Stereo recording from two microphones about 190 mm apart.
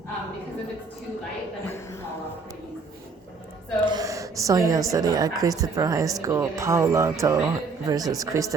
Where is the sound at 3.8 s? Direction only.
20° right (ahead or behind).